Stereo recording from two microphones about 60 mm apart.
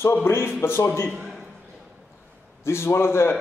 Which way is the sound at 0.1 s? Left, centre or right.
Left.